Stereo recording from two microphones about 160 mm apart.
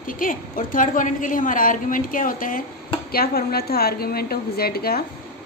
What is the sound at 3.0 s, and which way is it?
A woman's voice, 70° left (ahead or behind).